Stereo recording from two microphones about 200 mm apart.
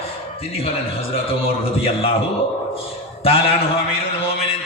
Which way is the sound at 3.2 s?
30° left (ahead or behind).